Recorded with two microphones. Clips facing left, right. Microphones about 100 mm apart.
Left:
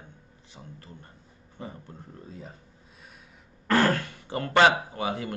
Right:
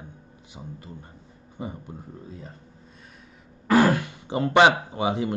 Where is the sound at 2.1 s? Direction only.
Centre (ahead or behind).